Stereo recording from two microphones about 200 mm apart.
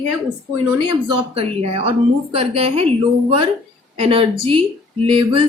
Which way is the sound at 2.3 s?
30° right (ahead or behind).